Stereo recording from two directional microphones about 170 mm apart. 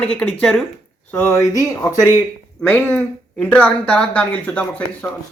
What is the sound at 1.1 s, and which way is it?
Speech, 15° left (ahead or behind).